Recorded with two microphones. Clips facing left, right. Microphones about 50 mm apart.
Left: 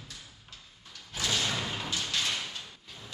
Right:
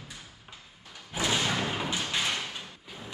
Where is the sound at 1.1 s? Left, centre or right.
Right.